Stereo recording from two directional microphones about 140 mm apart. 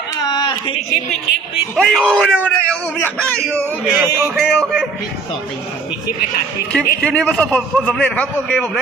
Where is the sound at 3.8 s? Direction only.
5° right (ahead or behind).